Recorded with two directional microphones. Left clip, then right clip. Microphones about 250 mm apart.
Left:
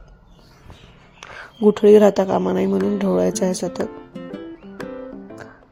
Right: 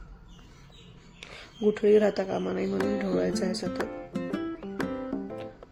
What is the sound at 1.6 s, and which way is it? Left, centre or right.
Speech, left.